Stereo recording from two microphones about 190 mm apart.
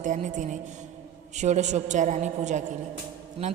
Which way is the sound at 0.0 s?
40° right (ahead or behind).